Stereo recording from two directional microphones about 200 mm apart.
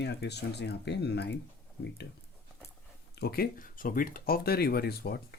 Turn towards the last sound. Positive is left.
turn(degrees=50)  # may be behind; listen again after turning